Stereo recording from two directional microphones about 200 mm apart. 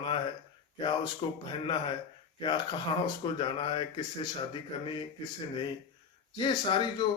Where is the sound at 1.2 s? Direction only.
25° left (ahead or behind).